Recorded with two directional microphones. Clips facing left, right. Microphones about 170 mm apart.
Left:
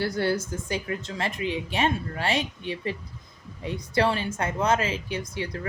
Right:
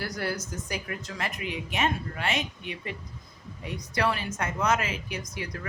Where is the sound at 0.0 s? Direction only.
30° left (ahead or behind).